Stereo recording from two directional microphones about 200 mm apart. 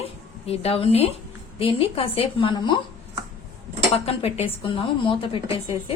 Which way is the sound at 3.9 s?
30° left (ahead or behind).